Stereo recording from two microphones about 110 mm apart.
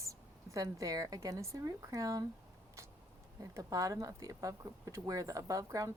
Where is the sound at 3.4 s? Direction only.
30° right (ahead or behind).